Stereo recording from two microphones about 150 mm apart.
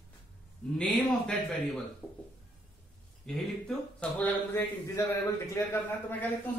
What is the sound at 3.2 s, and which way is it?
Speech, 5° left (ahead or behind).